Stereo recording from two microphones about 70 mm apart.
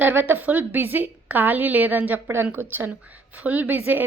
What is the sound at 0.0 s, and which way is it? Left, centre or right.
A woman's voice, right.